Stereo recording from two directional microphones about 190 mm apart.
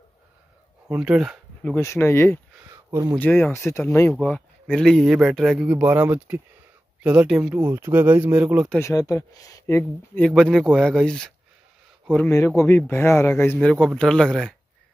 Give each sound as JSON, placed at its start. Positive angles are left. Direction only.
{"t": 0.8, "sound": "speech", "side_deg": -5}
{"t": 1.8, "sound": "speech", "side_deg": 15}
{"t": 2.7, "sound": "a sound", "side_deg": -15}
{"t": 3.2, "sound": "speech", "side_deg": 10}
{"t": 5.7, "sound": "speech", "side_deg": -10}
{"t": 8.6, "sound": "speech", "side_deg": 15}